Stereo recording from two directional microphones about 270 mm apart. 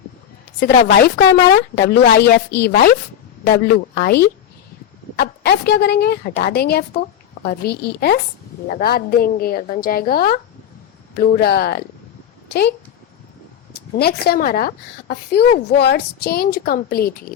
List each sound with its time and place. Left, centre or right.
0.6 s a woman's voice: left
13.9 s a woman's voice: left